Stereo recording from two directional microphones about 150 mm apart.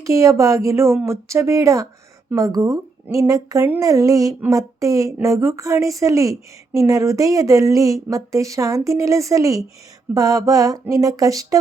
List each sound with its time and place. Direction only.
0.0 s a woman's voice: 20° right (ahead or behind)